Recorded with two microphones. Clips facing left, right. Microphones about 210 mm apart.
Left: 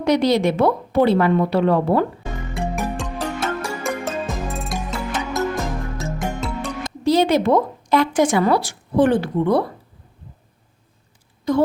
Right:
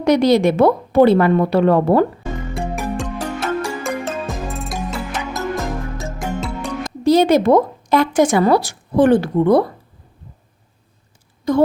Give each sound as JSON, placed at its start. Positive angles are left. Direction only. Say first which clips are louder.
{"t": 0.0, "sound": "a woman's voice", "louder": "right 4 dB", "side_deg": -50}
{"t": 2.6, "sound": "music", "louder": "even", "side_deg": 0}
{"t": 7.0, "sound": "speech", "louder": "right 4 dB", "side_deg": -45}
{"t": 11.5, "sound": "a woman's voice", "louder": "right 2 dB", "side_deg": -45}